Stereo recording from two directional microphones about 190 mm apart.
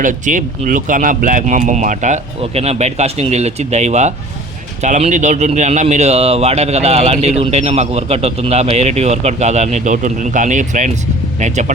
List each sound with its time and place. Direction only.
0.0 s speech: 45° right (ahead or behind)